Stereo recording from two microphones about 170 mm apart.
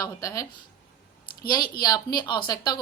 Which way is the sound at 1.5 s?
25° left (ahead or behind).